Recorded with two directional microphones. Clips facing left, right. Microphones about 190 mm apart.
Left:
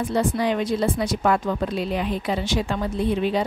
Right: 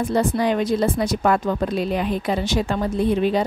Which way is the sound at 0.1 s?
45° right (ahead or behind).